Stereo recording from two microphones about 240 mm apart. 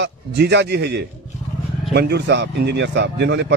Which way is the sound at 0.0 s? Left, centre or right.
Right.